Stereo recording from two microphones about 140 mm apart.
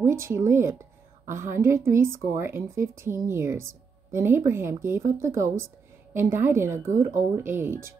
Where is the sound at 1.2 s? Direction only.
65° right (ahead or behind).